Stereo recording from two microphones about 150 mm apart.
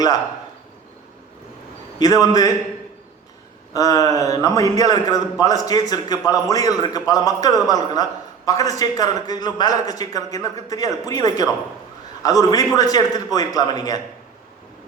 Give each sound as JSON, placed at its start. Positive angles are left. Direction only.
{"t": 2.0, "sound": "a man's voice", "side_deg": 25}
{"t": 3.8, "sound": "a man's voice", "side_deg": 25}